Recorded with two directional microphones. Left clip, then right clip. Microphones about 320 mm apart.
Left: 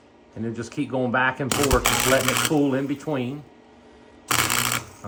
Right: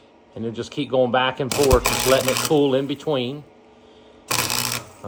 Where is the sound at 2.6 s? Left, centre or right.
Centre.